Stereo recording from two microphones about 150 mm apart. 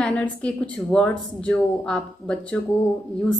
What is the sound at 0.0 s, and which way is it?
Speech, 10° left (ahead or behind).